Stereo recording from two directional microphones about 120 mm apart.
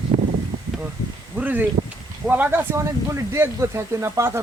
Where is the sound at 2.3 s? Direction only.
15° right (ahead or behind).